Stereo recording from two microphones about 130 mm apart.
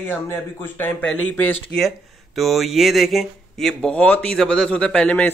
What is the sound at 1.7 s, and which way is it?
Speech, centre (ahead or behind).